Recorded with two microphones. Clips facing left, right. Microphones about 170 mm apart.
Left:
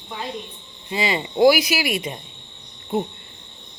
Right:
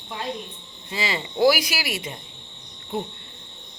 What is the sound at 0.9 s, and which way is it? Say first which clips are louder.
Speech: left 5 dB; 20° left (ahead or behind).